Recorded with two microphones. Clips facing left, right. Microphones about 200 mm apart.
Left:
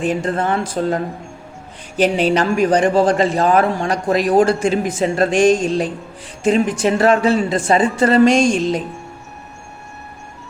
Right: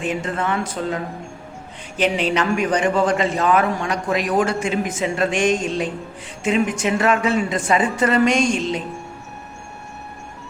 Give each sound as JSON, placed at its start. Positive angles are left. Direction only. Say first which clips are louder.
{"t": 0.0, "sound": "a man's voice", "louder": "left 5 dB", "side_deg": 35}